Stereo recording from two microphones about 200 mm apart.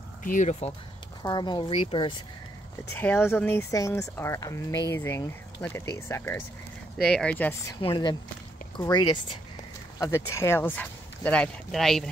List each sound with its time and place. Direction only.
0.2 s speech: 40° left (ahead or behind)
1.2 s speech: 20° left (ahead or behind)
2.9 s speech: 10° left (ahead or behind)
7.8 s speech: 20° left (ahead or behind); by 12.0 s centre (ahead or behind)